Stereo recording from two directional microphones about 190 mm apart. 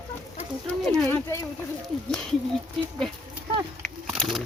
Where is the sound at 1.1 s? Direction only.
15° left (ahead or behind).